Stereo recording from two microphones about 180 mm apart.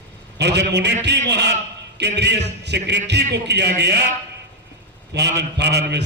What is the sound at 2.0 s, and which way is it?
A man's voice, 70° right (ahead or behind).